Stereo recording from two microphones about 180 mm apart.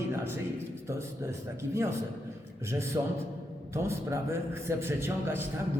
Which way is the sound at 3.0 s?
20° right (ahead or behind).